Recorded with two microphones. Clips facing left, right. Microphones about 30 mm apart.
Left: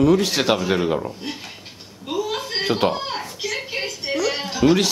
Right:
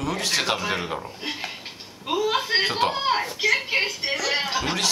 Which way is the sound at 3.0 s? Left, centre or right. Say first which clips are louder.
Right 4 dB; centre.